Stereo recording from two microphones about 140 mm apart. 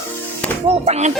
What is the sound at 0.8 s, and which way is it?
Music, 50° right (ahead or behind).